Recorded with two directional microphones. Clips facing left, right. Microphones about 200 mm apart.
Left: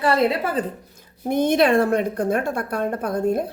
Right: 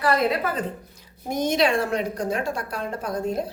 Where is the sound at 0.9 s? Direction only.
60° left (ahead or behind).